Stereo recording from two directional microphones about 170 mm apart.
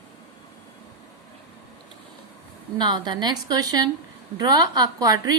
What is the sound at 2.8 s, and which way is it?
A woman's voice, 25° right (ahead or behind).